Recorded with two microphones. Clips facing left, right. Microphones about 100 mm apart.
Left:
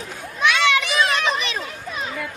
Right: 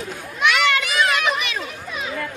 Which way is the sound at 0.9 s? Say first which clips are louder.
Even; 30° left (ahead or behind).